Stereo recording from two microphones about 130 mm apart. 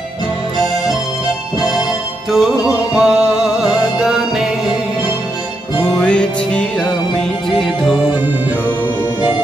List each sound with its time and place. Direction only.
2.3 s music: 5° right (ahead or behind)
5.9 s music: 10° left (ahead or behind)